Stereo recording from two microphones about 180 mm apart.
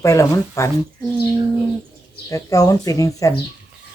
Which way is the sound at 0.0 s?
15° left (ahead or behind).